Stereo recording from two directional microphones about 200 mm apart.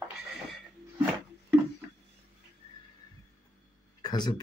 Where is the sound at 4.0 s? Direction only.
20° left (ahead or behind).